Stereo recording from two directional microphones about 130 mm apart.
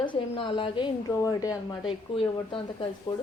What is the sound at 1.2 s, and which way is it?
A woman's voice, 30° left (ahead or behind).